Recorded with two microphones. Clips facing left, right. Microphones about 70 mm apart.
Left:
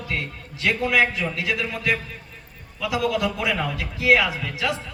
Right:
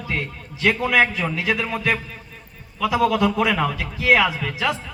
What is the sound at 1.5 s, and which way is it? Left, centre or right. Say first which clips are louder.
Speech: right 3 dB; right.